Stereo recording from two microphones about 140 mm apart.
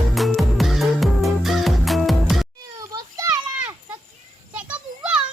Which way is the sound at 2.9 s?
25° right (ahead or behind).